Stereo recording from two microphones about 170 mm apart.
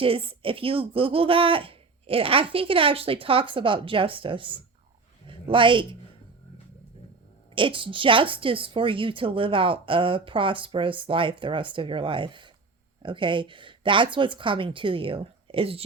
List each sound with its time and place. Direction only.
0.0 s speech: 35° right (ahead or behind)
7.5 s speech: 30° right (ahead or behind)